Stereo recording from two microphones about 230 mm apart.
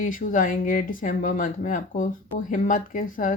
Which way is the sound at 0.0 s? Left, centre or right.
Left.